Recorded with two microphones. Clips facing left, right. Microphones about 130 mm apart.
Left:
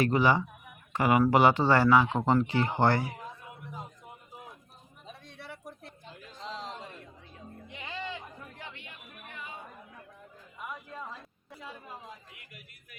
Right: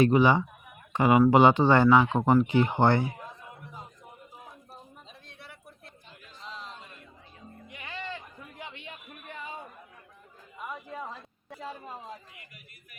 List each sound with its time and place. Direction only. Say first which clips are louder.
0.0 s speech: right 4 dB; 20° right (ahead or behind)
6.5 s a sound: left 3 dB; 90° left
7.7 s music: even; 20° left (ahead or behind)
8.5 s chatter: right 3 dB; 20° right (ahead or behind)